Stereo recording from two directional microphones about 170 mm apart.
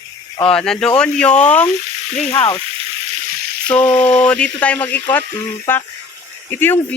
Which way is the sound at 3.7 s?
5° left (ahead or behind).